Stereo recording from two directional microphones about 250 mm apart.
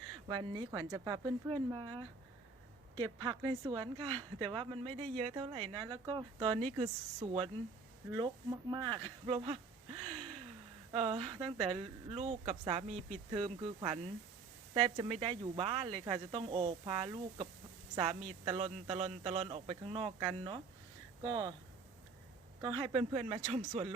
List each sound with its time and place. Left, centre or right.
0.3 s speech: centre
10.9 s speech: right
22.6 s speech: centre